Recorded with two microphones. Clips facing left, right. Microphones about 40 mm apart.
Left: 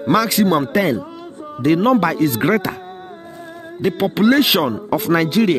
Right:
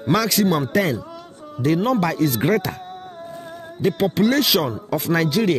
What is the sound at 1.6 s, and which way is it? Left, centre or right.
Speech, left.